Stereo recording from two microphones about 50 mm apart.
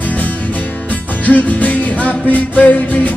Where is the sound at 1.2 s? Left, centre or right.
Left.